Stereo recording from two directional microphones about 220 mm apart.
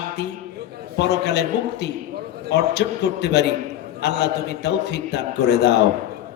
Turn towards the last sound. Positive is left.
turn(degrees=50)  # may be behind; listen again after turning